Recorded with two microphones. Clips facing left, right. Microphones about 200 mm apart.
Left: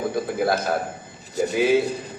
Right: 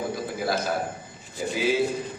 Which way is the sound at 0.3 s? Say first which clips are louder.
Left 5 dB; 55° left (ahead or behind).